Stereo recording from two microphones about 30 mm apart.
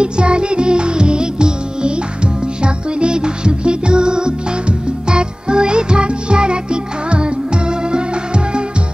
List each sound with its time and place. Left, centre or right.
0.0 s music: right